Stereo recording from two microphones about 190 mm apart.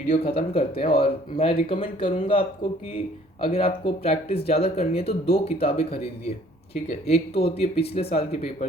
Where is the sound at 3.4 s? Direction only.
30° left (ahead or behind).